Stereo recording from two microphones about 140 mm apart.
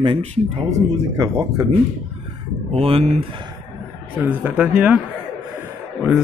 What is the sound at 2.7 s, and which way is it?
Speech, 45° right (ahead or behind).